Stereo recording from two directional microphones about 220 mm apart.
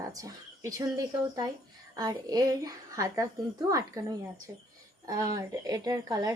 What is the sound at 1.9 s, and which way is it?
Speech, 15° right (ahead or behind).